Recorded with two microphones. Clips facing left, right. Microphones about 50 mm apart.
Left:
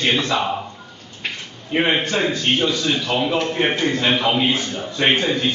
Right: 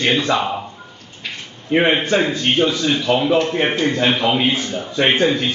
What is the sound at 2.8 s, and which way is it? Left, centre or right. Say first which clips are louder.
A man's voice: right 3 dB; centre.